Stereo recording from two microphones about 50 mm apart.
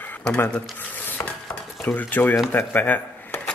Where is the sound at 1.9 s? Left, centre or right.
Left.